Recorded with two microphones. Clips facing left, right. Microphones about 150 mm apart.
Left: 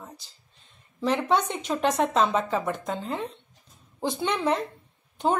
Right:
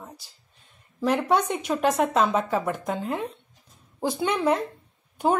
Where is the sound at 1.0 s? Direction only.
10° right (ahead or behind).